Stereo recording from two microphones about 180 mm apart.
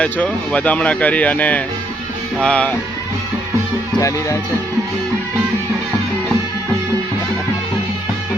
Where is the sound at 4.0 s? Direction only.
15° left (ahead or behind).